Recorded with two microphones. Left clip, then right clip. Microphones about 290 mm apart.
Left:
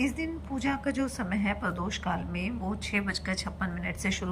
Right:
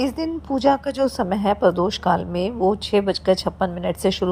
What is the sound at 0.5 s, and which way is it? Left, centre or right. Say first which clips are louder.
A woman's voice: right 14 dB; right.